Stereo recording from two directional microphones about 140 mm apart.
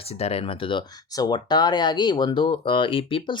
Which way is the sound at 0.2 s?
45° left (ahead or behind).